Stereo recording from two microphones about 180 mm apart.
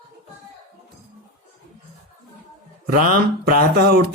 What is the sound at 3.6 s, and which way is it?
Speech, 60° right (ahead or behind).